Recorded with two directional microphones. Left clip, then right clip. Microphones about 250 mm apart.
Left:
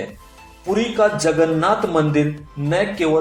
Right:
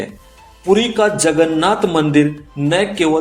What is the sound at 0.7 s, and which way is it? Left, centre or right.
A man's voice, right.